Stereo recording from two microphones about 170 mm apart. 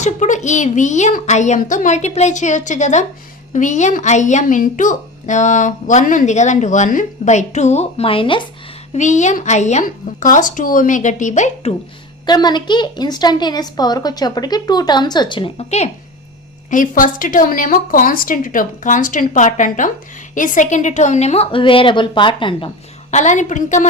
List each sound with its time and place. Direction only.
0.0 s a woman's voice: 45° left (ahead or behind)
9.0 s a woman's voice: 45° left (ahead or behind)
12.2 s a woman's voice: 25° left (ahead or behind)
16.6 s a woman's voice: 50° left (ahead or behind); by 22.7 s 30° left (ahead or behind)
23.1 s a woman's voice: 45° left (ahead or behind)